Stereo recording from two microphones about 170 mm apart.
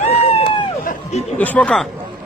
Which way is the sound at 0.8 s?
45° left (ahead or behind).